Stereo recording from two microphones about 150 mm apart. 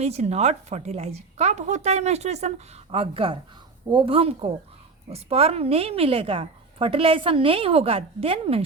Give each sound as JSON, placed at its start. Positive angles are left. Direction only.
{"t": 0.0, "sound": "a woman's voice", "side_deg": -45}